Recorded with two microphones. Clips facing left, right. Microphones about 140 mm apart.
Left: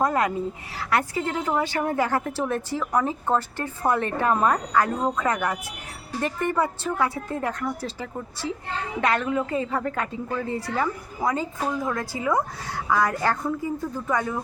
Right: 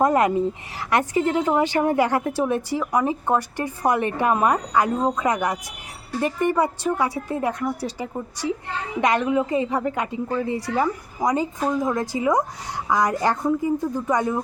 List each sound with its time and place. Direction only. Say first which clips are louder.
0.0 s a woman's voice: right 5 dB; 20° right (ahead or behind)